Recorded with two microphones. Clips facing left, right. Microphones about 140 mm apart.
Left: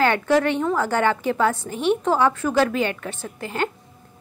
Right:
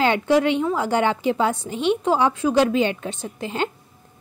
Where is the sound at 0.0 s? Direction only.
15° right (ahead or behind).